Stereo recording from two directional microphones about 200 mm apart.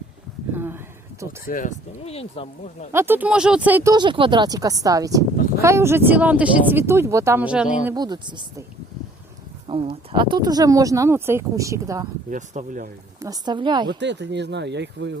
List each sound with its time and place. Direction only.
0.5 s speech: 10° right (ahead or behind)
1.5 s speech: 40° left (ahead or behind)
2.9 s speech: 10° right (ahead or behind)
3.9 s speech: 25° right (ahead or behind); by 7.7 s 5° right (ahead or behind)
7.9 s speech: 20° right (ahead or behind)
9.6 s speech: 25° right (ahead or behind)
12.3 s speech: 40° right (ahead or behind)
13.1 s speech: 15° right (ahead or behind)
14.0 s speech: 60° right (ahead or behind)